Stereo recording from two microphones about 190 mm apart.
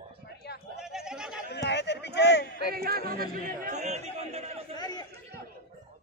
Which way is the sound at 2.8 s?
50° right (ahead or behind).